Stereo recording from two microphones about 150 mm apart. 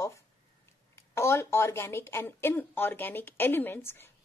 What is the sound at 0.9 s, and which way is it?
A woman's voice, 20° left (ahead or behind).